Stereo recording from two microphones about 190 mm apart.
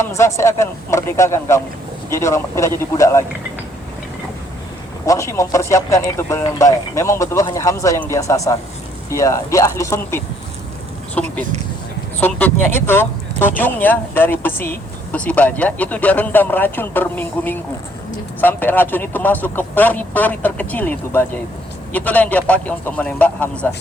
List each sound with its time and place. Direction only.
0.0 s speech: 15° left (ahead or behind)
5.0 s speech: 15° left (ahead or behind)